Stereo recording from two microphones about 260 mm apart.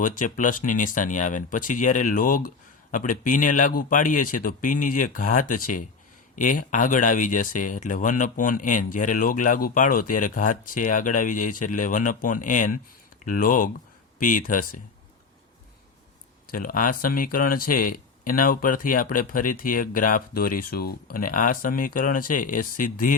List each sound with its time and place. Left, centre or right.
0.0 s speech: left
16.5 s speech: left